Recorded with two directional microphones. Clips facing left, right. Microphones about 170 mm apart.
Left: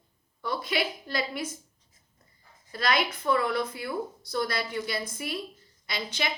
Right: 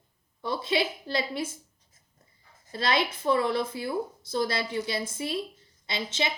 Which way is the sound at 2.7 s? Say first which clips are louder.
Even; 25° right (ahead or behind).